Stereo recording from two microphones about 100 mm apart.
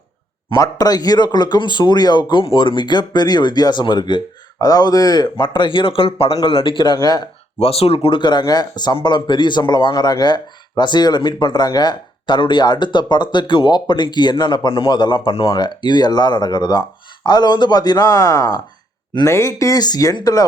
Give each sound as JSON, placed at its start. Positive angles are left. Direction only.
{"t": 0.5, "sound": "a man's voice", "side_deg": 35}
{"t": 2.3, "sound": "a man's voice", "side_deg": 60}
{"t": 6.3, "sound": "a man's voice", "side_deg": 55}
{"t": 7.6, "sound": "speech", "side_deg": 90}
{"t": 8.2, "sound": "a man's voice", "side_deg": 45}
{"t": 15.5, "sound": "a man's voice", "side_deg": 50}